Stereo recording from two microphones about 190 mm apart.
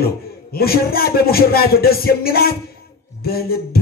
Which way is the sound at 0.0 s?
55° left (ahead or behind).